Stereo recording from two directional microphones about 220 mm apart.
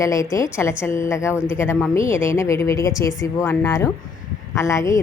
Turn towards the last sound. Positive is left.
turn(degrees=15)  # may be behind; listen again after turning